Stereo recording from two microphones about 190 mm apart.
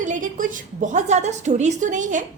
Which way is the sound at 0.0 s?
40° right (ahead or behind).